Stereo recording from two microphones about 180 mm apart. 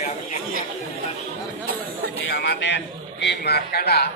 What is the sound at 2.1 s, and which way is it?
A man's voice, 70° left (ahead or behind).